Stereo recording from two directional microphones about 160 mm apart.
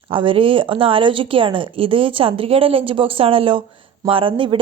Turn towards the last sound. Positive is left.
turn(degrees=-30)  # may be behind; listen again after turning